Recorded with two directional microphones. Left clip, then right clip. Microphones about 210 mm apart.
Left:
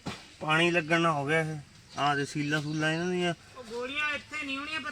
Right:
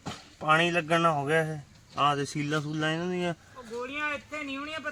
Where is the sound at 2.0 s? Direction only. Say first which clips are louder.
Right 2 dB; 45° right (ahead or behind).